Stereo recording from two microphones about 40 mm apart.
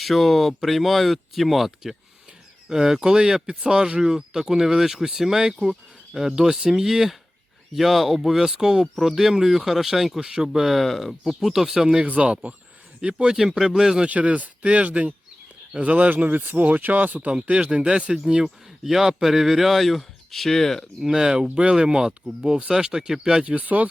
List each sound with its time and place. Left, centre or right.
0.0 s speech: centre
10.8 s speech: centre
11.2 s speech: centre
12.0 s speech: right
13.0 s speech: right
13.6 s speech: centre
14.0 s speech: right
17.4 s speech: right
18.4 s speech: centre
21.0 s speech: centre
23.4 s speech: right